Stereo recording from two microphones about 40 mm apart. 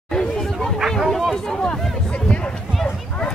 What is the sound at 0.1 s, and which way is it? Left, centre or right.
Chatter, centre.